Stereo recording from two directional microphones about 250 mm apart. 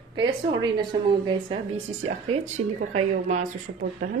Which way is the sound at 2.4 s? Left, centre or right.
Right.